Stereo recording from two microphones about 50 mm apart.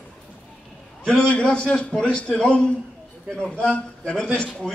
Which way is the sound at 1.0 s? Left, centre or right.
Centre.